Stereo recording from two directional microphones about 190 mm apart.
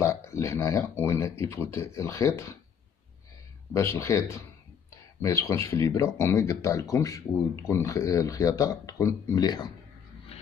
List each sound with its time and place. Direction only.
0.0 s speech: 15° left (ahead or behind)
3.7 s speech: 15° left (ahead or behind)